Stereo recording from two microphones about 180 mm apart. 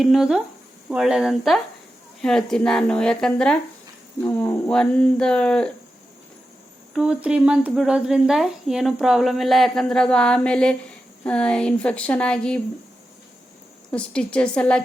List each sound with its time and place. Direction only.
0.0 s speech: centre (ahead or behind)
6.9 s speech: 5° right (ahead or behind)
13.9 s speech: 5° left (ahead or behind)